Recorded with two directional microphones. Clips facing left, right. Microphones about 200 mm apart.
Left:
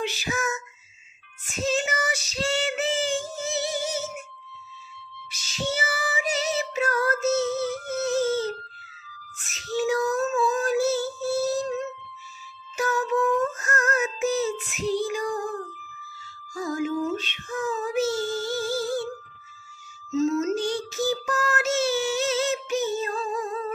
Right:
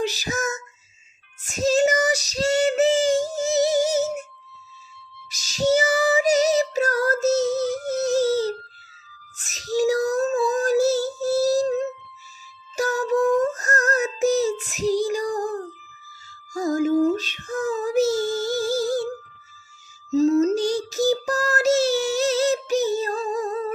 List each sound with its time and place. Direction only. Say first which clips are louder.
0.0 s child singing: right 3 dB; 40° right (ahead or behind)
5.3 s female singing: right 10 dB; 40° right (ahead or behind)
12.7 s music: right 3 dB; 40° right (ahead or behind)
20.1 s child singing: right 5 dB; 35° right (ahead or behind)